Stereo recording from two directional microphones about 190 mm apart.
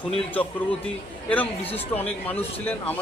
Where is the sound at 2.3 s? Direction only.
10° left (ahead or behind).